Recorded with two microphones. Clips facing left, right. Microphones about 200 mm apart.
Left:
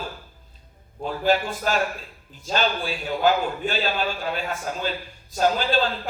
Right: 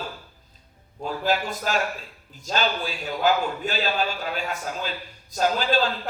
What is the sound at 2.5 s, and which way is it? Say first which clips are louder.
A man's voice: left 1 dB; 40° right (ahead or behind).